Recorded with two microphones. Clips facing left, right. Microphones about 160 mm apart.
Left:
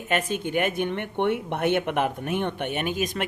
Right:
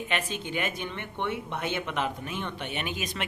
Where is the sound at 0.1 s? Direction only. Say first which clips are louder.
Left 9 dB; 50° left (ahead or behind).